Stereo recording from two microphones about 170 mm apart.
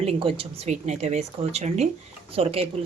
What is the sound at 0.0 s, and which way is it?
Speech, 35° right (ahead or behind).